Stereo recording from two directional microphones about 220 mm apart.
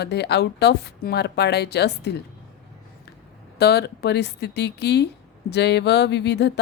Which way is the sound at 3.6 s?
50° left (ahead or behind).